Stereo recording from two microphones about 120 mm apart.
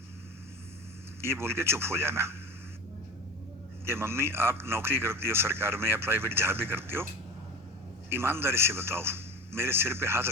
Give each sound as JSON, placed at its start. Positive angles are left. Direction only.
{"t": 1.2, "sound": "a man's voice", "side_deg": -20}
{"t": 3.8, "sound": "a man's voice", "side_deg": -20}
{"t": 8.1, "sound": "a man's voice", "side_deg": -20}